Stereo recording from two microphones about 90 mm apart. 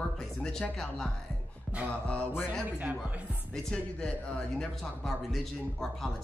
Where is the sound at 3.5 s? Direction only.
10° left (ahead or behind).